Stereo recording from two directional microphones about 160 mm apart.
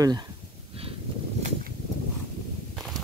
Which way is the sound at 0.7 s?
35° right (ahead or behind).